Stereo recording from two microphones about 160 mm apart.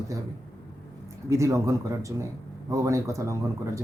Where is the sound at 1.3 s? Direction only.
20° right (ahead or behind).